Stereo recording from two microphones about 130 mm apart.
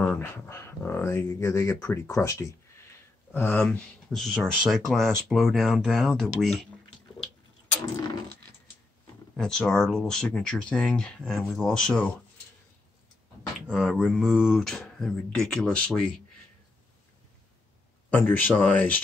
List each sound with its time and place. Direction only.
0.0 s speech: 15° left (ahead or behind)
3.3 s speech: 15° left (ahead or behind)
3.6 s speech: 5° left (ahead or behind)
9.4 s speech: 5° left (ahead or behind)
13.7 s speech: 5° right (ahead or behind)
18.1 s speech: 15° left (ahead or behind)